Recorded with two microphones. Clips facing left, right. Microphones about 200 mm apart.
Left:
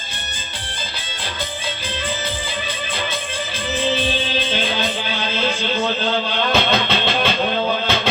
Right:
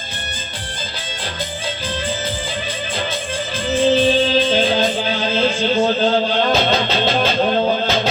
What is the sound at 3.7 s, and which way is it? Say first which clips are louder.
Music: right 7 dB; 45° right (ahead or behind).